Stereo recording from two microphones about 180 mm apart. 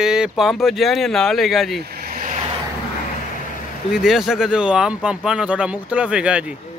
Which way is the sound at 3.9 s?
5° right (ahead or behind).